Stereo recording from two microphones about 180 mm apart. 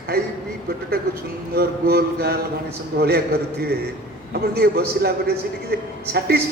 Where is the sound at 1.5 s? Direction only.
60° right (ahead or behind).